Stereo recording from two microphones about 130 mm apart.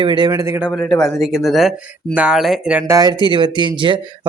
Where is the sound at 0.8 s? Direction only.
5° left (ahead or behind).